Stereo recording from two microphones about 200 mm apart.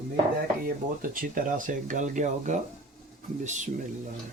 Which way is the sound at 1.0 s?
45° right (ahead or behind).